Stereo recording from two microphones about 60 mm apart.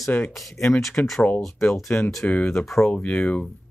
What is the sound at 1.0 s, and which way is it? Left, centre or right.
Speech, left.